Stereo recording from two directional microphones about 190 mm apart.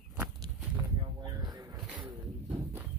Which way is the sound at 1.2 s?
20° right (ahead or behind).